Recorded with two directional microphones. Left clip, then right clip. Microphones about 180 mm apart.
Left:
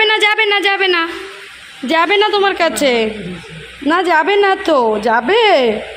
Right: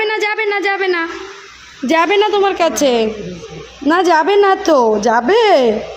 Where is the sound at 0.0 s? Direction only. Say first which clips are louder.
Left 4 dB; 5° right (ahead or behind).